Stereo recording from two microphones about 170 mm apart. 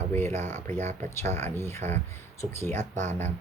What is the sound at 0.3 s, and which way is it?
Speech, 40° right (ahead or behind).